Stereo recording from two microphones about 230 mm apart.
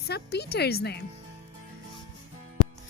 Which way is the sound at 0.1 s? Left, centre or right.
Left.